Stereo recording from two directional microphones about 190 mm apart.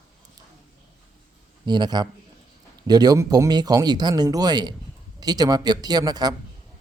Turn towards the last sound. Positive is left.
turn(degrees=-20)  # may be behind; listen again after turning